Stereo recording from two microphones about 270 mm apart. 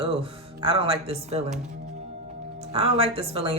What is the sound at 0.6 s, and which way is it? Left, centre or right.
Speech, centre.